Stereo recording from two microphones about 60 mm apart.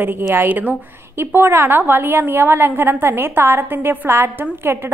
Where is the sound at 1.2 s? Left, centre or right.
Right.